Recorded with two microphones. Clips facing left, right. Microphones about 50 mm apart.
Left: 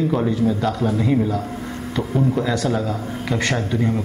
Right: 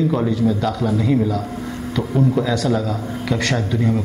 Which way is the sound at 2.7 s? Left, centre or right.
Left.